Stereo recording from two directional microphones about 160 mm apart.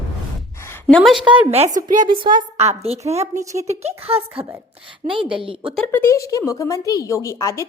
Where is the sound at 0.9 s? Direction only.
Centre (ahead or behind).